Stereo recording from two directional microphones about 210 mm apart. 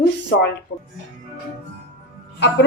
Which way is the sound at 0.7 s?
90° left.